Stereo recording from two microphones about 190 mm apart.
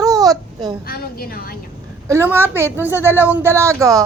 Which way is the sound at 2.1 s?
10° right (ahead or behind).